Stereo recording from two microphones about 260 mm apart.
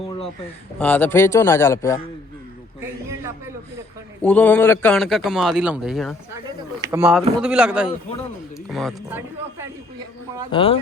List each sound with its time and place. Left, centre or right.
0.8 s a man's voice: centre
2.8 s a sound: centre
4.2 s a man's voice: centre
6.8 s a man's voice: centre
10.5 s speech: left